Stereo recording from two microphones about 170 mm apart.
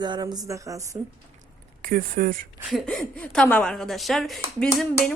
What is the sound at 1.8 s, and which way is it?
Speech, 55° right (ahead or behind).